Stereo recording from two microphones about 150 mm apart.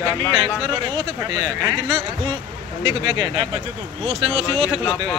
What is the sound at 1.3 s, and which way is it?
Speech, 25° right (ahead or behind).